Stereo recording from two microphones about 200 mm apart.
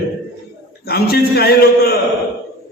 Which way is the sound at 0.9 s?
50° left (ahead or behind).